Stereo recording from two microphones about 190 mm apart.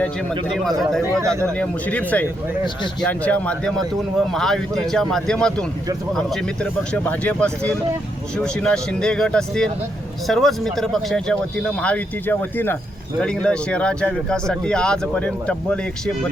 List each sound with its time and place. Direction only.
0.8 s speech: centre (ahead or behind)
1.0 s speech: 15° right (ahead or behind)
1.5 s speech: 5° left (ahead or behind)